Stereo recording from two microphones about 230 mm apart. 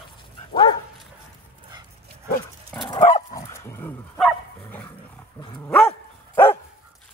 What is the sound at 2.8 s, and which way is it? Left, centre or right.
Dog, centre.